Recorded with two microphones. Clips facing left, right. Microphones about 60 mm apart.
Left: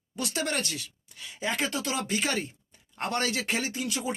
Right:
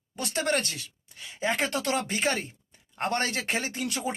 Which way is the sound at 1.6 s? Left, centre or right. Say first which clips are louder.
Right 2 dB; right.